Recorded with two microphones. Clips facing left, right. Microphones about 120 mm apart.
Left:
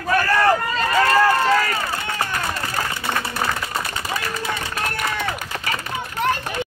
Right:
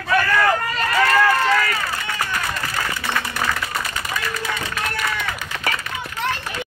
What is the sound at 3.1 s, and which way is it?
Clapping, 30° left (ahead or behind).